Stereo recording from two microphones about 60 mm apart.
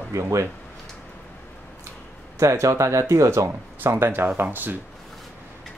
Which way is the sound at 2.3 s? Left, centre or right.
Right.